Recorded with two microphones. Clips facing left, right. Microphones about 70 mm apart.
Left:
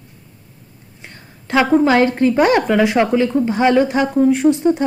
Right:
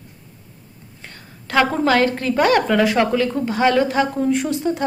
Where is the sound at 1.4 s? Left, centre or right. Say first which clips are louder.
Left 4 dB; centre.